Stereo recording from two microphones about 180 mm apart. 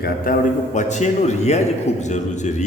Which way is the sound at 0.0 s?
50° left (ahead or behind).